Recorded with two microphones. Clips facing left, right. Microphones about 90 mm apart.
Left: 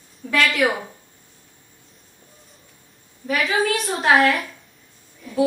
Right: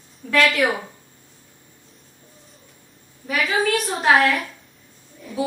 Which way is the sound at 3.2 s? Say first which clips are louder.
Left 1 dB; centre (ahead or behind).